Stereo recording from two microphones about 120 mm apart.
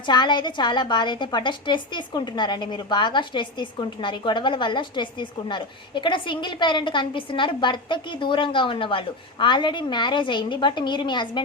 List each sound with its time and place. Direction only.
0.0 s a woman's voice: 40° left (ahead or behind)